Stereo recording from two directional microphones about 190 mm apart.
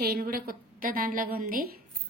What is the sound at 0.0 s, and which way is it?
A woman's voice, 55° right (ahead or behind).